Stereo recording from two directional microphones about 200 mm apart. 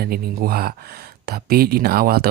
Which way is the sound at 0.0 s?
50° right (ahead or behind).